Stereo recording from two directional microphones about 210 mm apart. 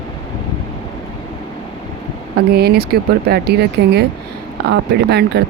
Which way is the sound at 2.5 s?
50° right (ahead or behind).